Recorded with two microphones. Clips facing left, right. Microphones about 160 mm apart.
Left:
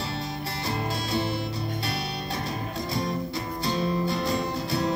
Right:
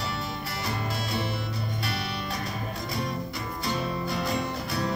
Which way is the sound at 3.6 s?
30° left (ahead or behind).